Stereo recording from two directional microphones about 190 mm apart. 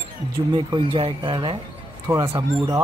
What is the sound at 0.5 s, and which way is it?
Speech, 25° right (ahead or behind).